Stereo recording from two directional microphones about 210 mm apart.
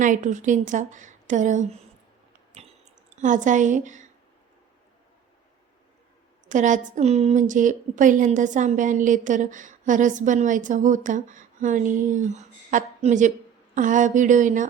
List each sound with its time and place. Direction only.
0.0 s a woman's voice: 35° right (ahead or behind)
3.2 s a woman's voice: 35° right (ahead or behind)
6.5 s a woman's voice: 35° right (ahead or behind)